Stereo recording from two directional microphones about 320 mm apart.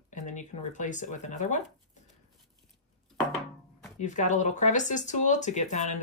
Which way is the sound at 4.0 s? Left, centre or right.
Left.